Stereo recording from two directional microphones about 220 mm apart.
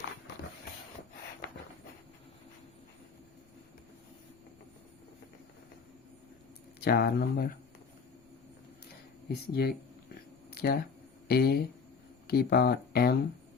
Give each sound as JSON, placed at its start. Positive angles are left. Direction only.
{"t": 6.7, "sound": "speech", "side_deg": 45}
{"t": 9.3, "sound": "speech", "side_deg": 45}